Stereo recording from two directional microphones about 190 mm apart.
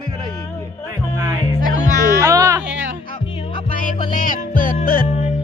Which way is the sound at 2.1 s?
15° right (ahead or behind).